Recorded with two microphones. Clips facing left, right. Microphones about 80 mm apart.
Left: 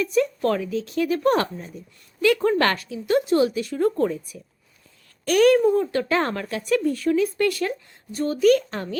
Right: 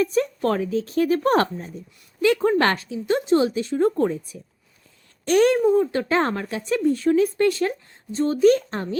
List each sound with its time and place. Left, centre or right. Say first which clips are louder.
0.0 s speech: even; right
2.2 s speech: right 1 dB; right
5.6 s speech: right 1 dB; centre